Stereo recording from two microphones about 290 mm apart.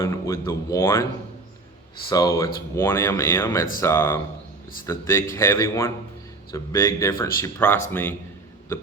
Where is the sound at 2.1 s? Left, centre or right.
Centre.